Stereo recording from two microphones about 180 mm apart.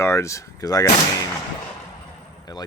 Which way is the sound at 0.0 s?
15° left (ahead or behind).